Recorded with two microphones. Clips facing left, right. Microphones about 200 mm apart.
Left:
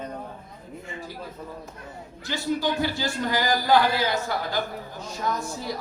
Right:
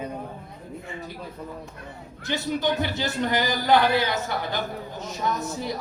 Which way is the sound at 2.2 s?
20° right (ahead or behind).